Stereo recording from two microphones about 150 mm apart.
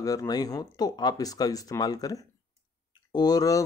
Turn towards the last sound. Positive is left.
turn(degrees=25)  # may be behind; listen again after turning